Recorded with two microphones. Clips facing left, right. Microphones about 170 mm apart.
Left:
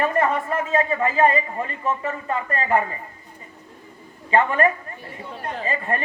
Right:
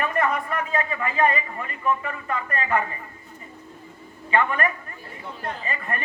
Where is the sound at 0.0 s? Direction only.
30° left (ahead or behind).